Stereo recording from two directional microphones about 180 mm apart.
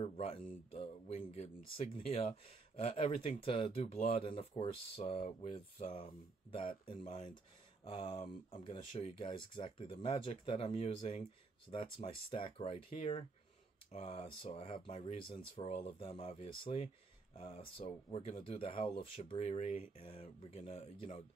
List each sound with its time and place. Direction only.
0.0 s speech: 35° left (ahead or behind)